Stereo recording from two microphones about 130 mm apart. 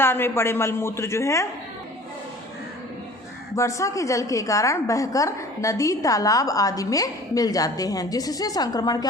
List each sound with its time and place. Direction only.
0.0 s a woman's voice: 20° left (ahead or behind)
3.5 s a woman's voice: 25° left (ahead or behind)